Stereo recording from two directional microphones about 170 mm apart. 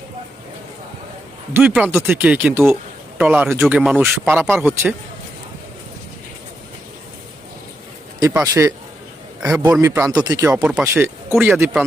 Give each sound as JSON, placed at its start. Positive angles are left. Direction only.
{"t": 1.5, "sound": "speech", "side_deg": -5}
{"t": 8.3, "sound": "speech", "side_deg": -15}
{"t": 9.4, "sound": "a man's voice", "side_deg": -5}
{"t": 9.8, "sound": "speech", "side_deg": -15}
{"t": 10.6, "sound": "speech", "side_deg": -5}